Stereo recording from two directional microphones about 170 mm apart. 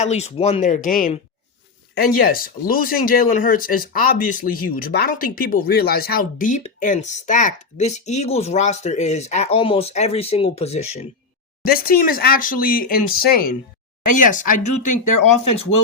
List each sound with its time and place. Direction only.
0.0 s speech: 40° left (ahead or behind)
11.6 s speech: 60° left (ahead or behind)